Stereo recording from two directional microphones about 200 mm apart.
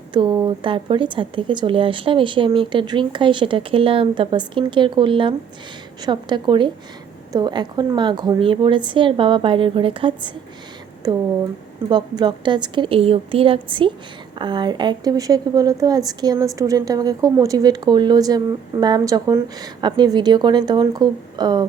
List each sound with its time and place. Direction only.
0.1 s speech: 25° right (ahead or behind)